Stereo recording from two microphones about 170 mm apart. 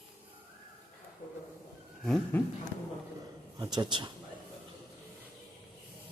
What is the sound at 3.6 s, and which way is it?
Speech, 25° right (ahead or behind).